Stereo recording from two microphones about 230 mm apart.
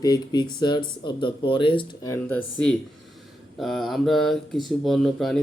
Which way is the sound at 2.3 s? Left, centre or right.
Centre.